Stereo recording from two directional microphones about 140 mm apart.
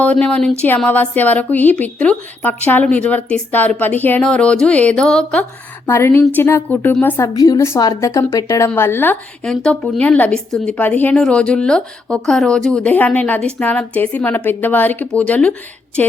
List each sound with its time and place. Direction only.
0.0 s a woman's voice: 10° left (ahead or behind)
7.3 s a woman's voice: 25° left (ahead or behind)
9.4 s a woman's voice: 5° left (ahead or behind)